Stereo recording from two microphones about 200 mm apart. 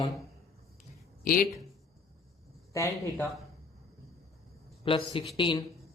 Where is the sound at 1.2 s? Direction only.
45° left (ahead or behind).